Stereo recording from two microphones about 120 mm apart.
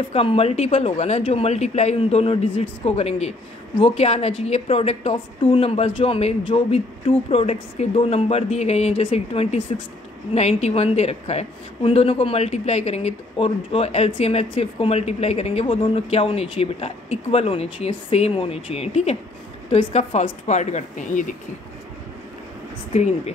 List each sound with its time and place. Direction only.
0.1 s a woman's voice: 50° left (ahead or behind); by 21.4 s 90° left
22.9 s speech: 70° left (ahead or behind)